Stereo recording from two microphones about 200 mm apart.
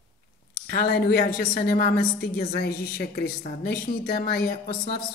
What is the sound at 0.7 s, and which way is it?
Speech, 50° left (ahead or behind).